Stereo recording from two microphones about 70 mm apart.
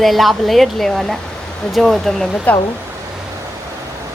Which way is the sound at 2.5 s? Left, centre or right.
Left.